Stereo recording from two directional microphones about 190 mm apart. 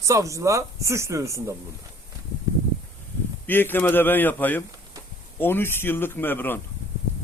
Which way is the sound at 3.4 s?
10° left (ahead or behind).